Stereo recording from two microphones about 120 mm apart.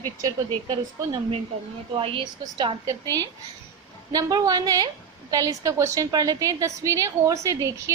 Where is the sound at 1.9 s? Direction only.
45° right (ahead or behind).